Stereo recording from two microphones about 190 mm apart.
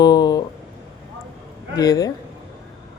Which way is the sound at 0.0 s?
20° left (ahead or behind).